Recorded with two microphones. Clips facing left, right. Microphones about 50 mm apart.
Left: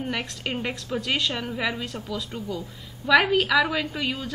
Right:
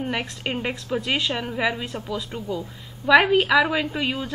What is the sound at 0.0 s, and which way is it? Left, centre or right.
A woman's voice, centre.